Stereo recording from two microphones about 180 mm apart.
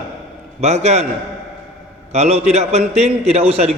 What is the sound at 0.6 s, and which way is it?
Speech, 35° right (ahead or behind).